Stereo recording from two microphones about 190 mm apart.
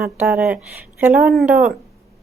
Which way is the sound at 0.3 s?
5° right (ahead or behind).